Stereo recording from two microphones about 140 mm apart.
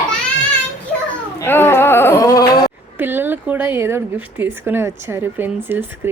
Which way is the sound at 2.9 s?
15° right (ahead or behind).